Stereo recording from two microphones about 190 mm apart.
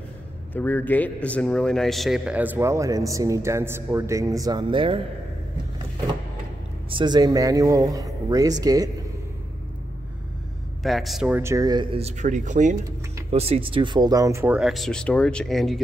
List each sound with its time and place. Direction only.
0.6 s a man's voice: 10° left (ahead or behind); by 5.0 s 25° right (ahead or behind)
6.9 s speech: 25° right (ahead or behind)
10.8 s a man's voice: centre (ahead or behind)